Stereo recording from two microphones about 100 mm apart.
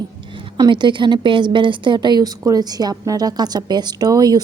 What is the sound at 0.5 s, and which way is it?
A woman's voice, 50° right (ahead or behind).